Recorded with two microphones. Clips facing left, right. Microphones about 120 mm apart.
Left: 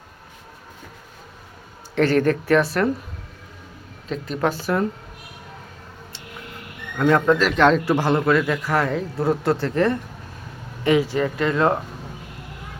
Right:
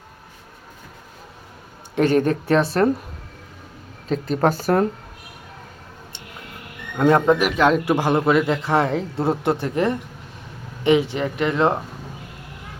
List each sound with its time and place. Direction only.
2.0 s a man's voice: 20° right (ahead or behind)
4.1 s speech: 40° right (ahead or behind)
7.1 s a man's voice: 15° right (ahead or behind)